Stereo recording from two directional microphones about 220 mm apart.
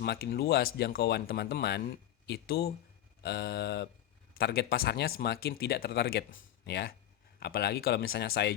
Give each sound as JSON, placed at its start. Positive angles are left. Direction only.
{"t": 0.0, "sound": "speech", "side_deg": 45}